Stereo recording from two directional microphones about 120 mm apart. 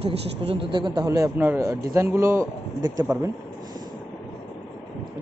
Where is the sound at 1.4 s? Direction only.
20° right (ahead or behind).